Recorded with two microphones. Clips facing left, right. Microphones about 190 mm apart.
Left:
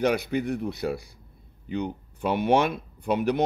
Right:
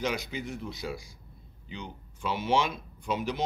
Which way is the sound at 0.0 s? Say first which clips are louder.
Left 8 dB; 60° left (ahead or behind).